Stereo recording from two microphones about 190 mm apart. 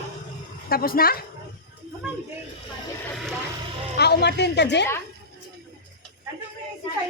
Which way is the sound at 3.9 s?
60° left (ahead or behind).